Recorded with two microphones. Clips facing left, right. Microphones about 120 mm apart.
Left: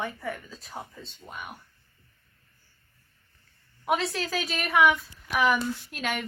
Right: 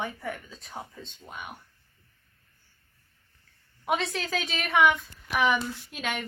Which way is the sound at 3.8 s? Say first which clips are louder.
Left 1 dB; centre (ahead or behind).